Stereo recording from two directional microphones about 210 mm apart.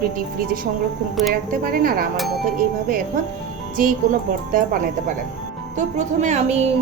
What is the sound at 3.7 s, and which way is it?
A woman's voice, 40° right (ahead or behind).